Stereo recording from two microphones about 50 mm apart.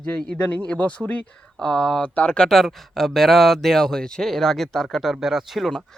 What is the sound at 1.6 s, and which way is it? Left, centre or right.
Speech, centre.